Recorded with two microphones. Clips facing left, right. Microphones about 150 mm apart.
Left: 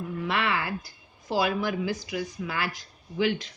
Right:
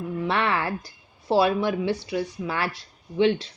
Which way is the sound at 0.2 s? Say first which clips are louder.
Right 4 dB; 30° right (ahead or behind).